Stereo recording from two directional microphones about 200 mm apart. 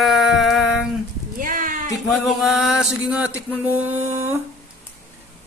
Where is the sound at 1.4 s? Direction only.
40° right (ahead or behind).